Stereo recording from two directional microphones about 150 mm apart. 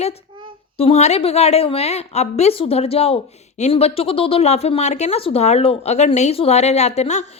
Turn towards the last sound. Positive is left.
turn(degrees=50)  # may be behind; listen again after turning